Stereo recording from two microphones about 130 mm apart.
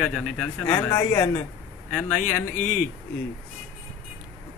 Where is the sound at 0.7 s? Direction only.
25° left (ahead or behind).